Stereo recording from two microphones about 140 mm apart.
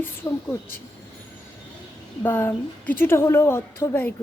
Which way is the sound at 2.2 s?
15° left (ahead or behind).